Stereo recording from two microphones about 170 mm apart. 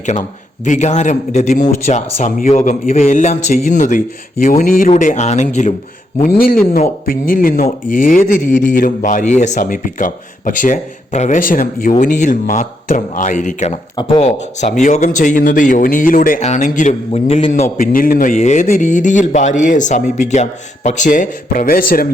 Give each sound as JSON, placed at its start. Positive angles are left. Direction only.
{"t": 0.0, "sound": "speech", "side_deg": 45}
{"t": 4.9, "sound": "speech", "side_deg": 45}
{"t": 6.2, "sound": "speech", "side_deg": 60}
{"t": 13.9, "sound": "speech", "side_deg": 30}
{"t": 17.5, "sound": "speech", "side_deg": 50}